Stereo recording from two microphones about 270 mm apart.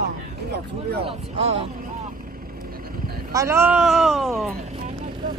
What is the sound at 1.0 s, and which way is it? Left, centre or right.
Speech, right.